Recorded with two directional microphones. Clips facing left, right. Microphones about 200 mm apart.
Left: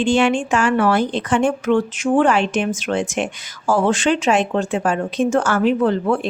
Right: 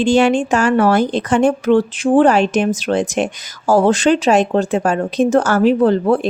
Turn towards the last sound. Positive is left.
turn(degrees=-35)  # may be behind; listen again after turning